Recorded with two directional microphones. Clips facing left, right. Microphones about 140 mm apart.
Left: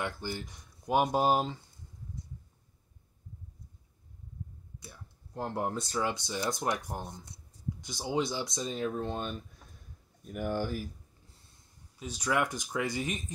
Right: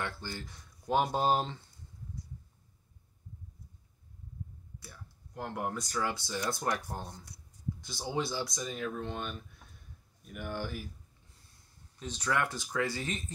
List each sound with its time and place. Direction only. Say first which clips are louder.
0.0 s speech: left 3 dB; 15° left (ahead or behind)
4.7 s speech: left 1 dB; 25° left (ahead or behind); by 10.8 s 40° left (ahead or behind)
12.0 s speech: left 2 dB; 10° left (ahead or behind)